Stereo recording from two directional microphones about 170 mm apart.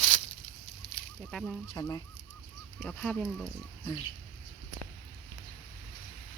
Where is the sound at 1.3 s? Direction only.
Centre (ahead or behind).